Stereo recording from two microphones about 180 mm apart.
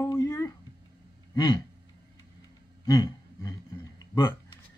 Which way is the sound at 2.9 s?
20° left (ahead or behind).